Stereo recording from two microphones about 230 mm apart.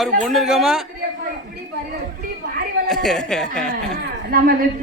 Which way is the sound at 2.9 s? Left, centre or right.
Centre.